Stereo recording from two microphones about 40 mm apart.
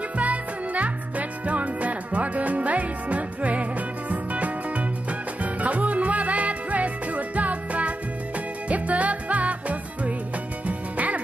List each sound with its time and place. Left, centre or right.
0.2 s music: right